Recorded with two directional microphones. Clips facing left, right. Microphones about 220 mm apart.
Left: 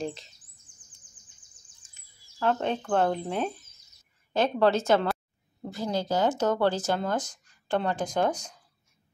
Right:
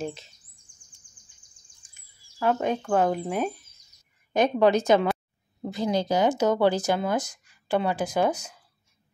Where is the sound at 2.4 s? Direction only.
10° right (ahead or behind).